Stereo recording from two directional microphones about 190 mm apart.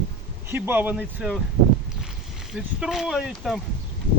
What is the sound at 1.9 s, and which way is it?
Boat, 5° right (ahead or behind).